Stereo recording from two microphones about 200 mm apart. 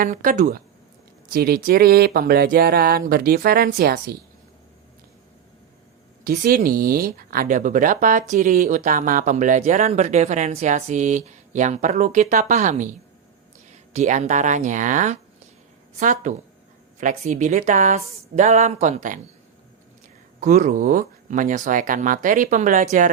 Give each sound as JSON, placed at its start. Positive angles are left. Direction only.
{"t": 0.0, "sound": "speech", "side_deg": -45}
{"t": 6.2, "sound": "speech", "side_deg": -45}
{"t": 20.4, "sound": "speech", "side_deg": -35}